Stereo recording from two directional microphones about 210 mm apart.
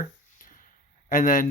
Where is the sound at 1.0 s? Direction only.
40° left (ahead or behind).